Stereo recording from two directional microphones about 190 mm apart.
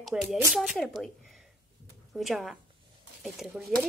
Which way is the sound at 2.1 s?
Centre (ahead or behind).